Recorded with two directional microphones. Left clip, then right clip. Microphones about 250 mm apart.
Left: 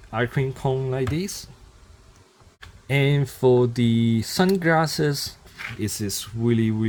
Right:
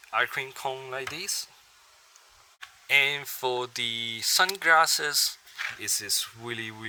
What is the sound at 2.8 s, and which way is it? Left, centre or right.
Speech, centre.